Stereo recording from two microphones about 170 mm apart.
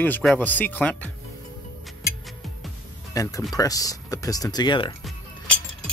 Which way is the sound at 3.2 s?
20° left (ahead or behind).